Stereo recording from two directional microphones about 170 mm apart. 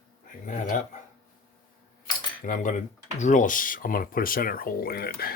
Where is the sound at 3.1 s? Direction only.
45° left (ahead or behind).